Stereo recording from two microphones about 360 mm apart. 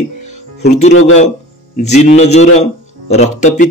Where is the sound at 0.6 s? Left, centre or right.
Centre.